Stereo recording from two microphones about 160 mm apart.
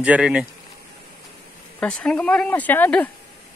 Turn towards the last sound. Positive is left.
turn(degrees=10)  # may be behind; listen again after turning